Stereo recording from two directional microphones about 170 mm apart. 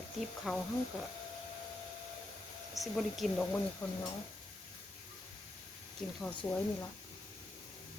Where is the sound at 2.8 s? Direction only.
Centre (ahead or behind).